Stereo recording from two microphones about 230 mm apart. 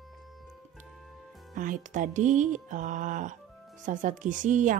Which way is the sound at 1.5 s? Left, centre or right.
Right.